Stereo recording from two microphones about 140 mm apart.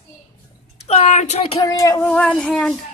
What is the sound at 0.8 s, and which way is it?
Speech, 50° left (ahead or behind).